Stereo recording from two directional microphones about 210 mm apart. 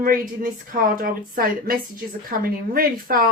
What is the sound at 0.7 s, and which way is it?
Speech, 40° right (ahead or behind).